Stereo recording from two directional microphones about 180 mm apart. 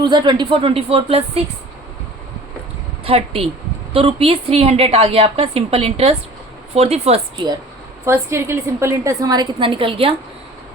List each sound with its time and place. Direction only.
0.0 s a woman's voice: 25° right (ahead or behind)
3.0 s a woman's voice: 30° right (ahead or behind)
8.0 s a woman's voice: 15° right (ahead or behind)